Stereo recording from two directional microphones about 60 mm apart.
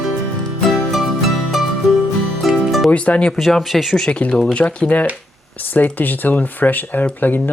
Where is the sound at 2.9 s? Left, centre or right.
Left.